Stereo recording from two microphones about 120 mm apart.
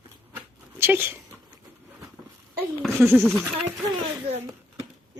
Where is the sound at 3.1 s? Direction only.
10° right (ahead or behind).